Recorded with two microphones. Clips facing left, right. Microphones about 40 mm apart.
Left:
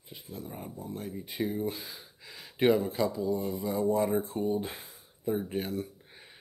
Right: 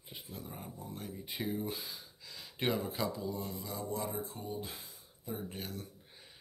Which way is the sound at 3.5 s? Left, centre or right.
Left.